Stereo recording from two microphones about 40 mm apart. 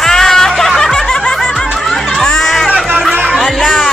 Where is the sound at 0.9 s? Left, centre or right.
Centre.